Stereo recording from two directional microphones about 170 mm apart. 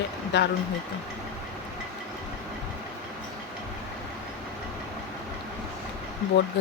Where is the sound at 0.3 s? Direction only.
85° left.